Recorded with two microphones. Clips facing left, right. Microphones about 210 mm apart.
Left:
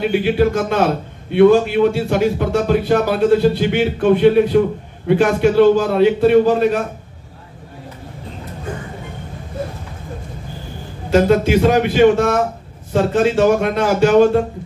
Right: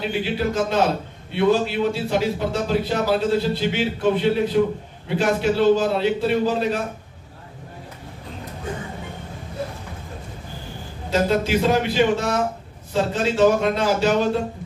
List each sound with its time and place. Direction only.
0.0 s a man's voice: 55° left (ahead or behind)
11.1 s a man's voice: 55° left (ahead or behind)